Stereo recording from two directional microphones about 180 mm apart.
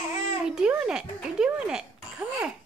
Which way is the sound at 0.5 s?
5° right (ahead or behind).